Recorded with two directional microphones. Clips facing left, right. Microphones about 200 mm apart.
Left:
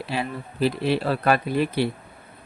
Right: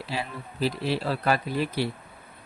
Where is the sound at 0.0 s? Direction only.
60° left (ahead or behind).